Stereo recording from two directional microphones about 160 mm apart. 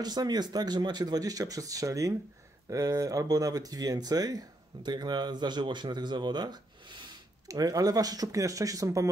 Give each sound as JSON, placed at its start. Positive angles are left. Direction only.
{"t": 0.0, "sound": "speech", "side_deg": -25}